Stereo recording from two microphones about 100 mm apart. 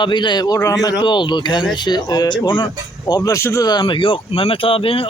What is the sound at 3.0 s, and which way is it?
Speech, 35° left (ahead or behind).